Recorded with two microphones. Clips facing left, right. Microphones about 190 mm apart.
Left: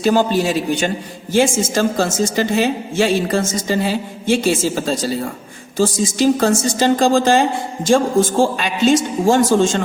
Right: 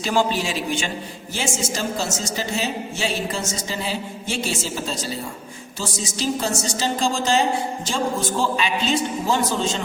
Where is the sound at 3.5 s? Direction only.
50° left (ahead or behind).